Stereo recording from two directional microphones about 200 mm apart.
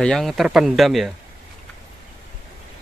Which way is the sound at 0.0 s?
Centre (ahead or behind).